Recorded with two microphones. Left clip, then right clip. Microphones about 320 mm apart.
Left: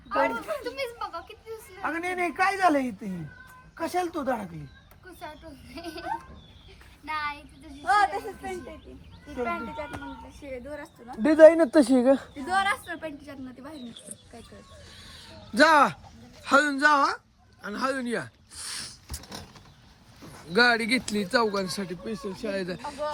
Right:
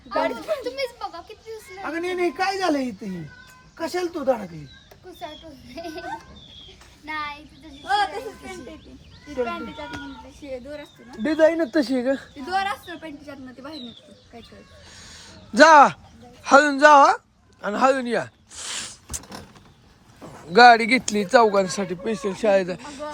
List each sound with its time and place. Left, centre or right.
0.1 s a sound: centre
1.8 s a man's voice: centre
7.0 s child singing: centre
9.3 s speech: centre
11.2 s speech: left; by 13.7 s centre
14.9 s a sound: centre
16.4 s speech: centre
20.2 s speech: centre